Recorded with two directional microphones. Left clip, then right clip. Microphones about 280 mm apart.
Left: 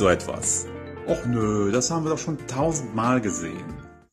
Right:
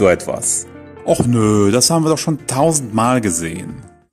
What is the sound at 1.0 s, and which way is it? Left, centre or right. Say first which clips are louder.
Speech: right 10 dB; right.